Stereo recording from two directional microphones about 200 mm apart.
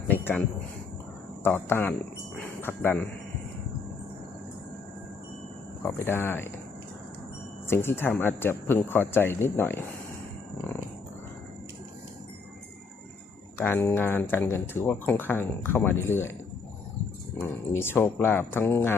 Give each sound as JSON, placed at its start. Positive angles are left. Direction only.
{"t": 0.1, "sound": "a sound", "side_deg": 10}
{"t": 1.5, "sound": "speech", "side_deg": 10}
{"t": 2.4, "sound": "cricket", "side_deg": 10}
{"t": 5.8, "sound": "speech", "side_deg": 10}
{"t": 7.7, "sound": "speech", "side_deg": 10}
{"t": 13.6, "sound": "speech", "side_deg": 10}
{"t": 17.3, "sound": "speech", "side_deg": 10}